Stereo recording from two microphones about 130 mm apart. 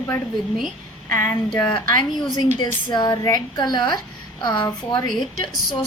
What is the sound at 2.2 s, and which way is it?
A woman's voice, 35° left (ahead or behind).